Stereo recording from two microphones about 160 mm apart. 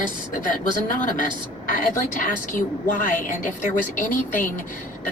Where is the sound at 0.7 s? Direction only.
55° left (ahead or behind).